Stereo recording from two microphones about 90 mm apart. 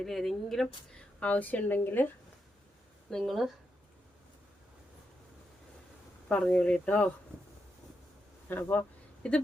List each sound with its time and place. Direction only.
0.0 s speech: 5° left (ahead or behind)
0.9 s a woman's voice: 15° left (ahead or behind)
3.1 s speech: centre (ahead or behind)
6.2 s a woman's voice: 15° left (ahead or behind)
8.5 s speech: 20° left (ahead or behind)
9.2 s a woman's voice: 10° left (ahead or behind)